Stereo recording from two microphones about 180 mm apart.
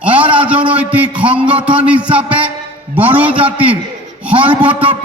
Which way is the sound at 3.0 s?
10° right (ahead or behind).